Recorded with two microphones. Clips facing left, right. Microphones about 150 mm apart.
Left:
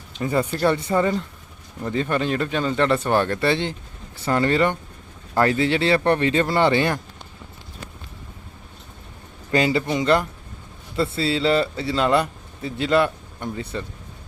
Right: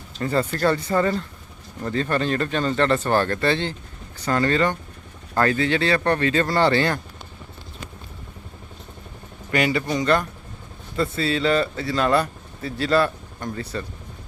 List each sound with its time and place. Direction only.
0.2 s speech: 10° left (ahead or behind)
9.5 s speech: 25° left (ahead or behind)